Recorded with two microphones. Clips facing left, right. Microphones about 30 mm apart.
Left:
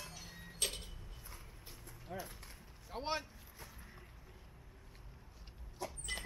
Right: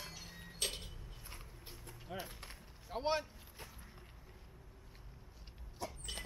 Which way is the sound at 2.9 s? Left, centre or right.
Centre.